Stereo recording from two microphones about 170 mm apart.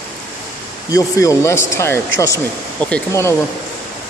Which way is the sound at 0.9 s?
20° left (ahead or behind).